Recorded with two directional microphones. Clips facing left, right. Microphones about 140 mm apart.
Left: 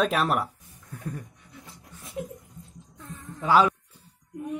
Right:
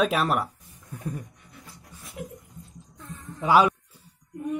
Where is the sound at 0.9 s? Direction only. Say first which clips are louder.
Right 2 dB; 15° right (ahead or behind).